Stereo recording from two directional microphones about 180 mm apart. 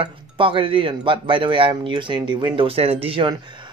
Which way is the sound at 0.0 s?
30° right (ahead or behind).